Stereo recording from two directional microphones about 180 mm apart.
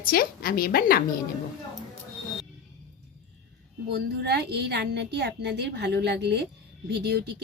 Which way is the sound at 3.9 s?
65° right (ahead or behind).